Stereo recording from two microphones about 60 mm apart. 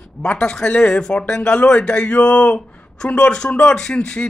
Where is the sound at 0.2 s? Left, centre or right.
Centre.